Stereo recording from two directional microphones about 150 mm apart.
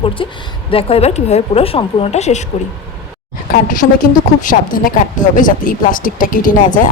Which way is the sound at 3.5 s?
65° left (ahead or behind).